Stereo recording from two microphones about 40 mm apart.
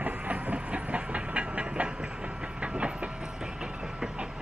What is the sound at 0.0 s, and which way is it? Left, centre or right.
Train, right.